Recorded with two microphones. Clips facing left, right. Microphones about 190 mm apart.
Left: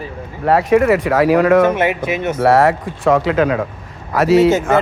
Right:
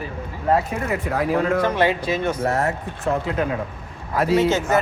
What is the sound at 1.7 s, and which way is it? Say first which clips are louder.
Speech: left 2 dB; 20° left (ahead or behind).